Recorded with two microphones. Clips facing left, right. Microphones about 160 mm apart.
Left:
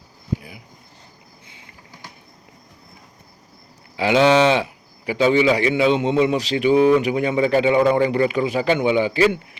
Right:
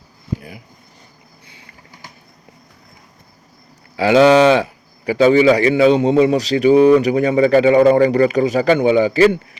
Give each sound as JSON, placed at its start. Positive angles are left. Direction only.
{"t": 3.9, "sound": "speech", "side_deg": -40}